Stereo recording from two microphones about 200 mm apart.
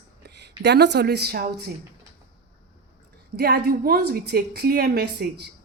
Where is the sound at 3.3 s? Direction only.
50° right (ahead or behind).